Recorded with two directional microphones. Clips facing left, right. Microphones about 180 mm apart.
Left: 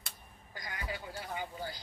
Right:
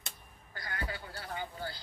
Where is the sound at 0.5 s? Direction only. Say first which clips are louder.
Right 1 dB; 15° left (ahead or behind).